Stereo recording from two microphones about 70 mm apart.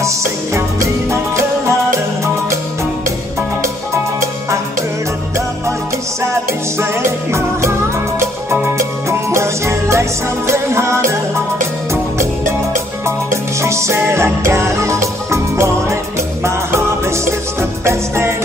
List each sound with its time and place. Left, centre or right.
0.6 s music: right
6.8 s music: right
8.7 s music: right
13.0 s music: right